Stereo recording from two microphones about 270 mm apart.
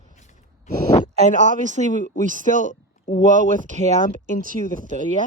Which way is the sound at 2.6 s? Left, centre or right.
Left.